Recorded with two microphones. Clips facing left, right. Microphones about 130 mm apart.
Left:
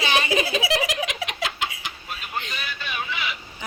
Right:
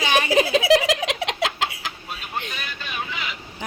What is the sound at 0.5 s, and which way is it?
Giggle, 80° right.